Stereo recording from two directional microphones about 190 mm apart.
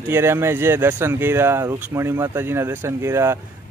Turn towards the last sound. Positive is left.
turn(degrees=-15)  # may be behind; listen again after turning